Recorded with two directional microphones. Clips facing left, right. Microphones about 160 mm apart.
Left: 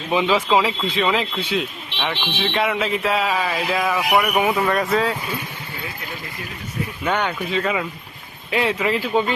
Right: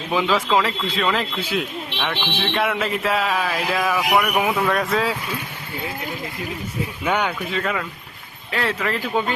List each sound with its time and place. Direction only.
0.1 s speech: 5° left (ahead or behind)
7.0 s speech: 10° right (ahead or behind)